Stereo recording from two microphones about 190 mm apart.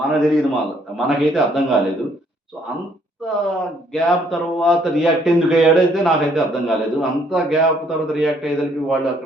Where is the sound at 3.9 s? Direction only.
Centre (ahead or behind).